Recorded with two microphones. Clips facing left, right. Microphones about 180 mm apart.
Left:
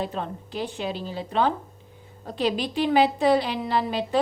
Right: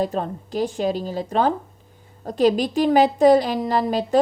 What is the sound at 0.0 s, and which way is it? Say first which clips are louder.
Speech: right 6 dB; 40° right (ahead or behind).